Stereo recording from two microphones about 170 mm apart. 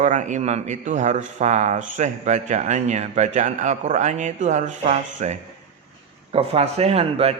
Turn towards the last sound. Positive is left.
turn(degrees=-35)  # may be behind; listen again after turning